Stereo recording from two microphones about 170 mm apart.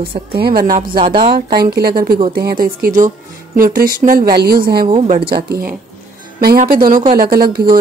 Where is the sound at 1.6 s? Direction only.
65° right (ahead or behind).